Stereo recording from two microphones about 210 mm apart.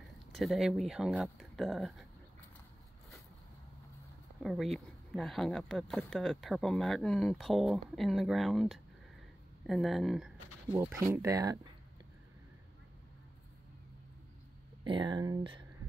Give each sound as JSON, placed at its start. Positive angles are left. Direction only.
{"t": 0.3, "sound": "speech", "side_deg": 0}
{"t": 4.4, "sound": "speech", "side_deg": 0}
{"t": 10.8, "sound": "speech", "side_deg": -15}
{"t": 14.9, "sound": "speech", "side_deg": -20}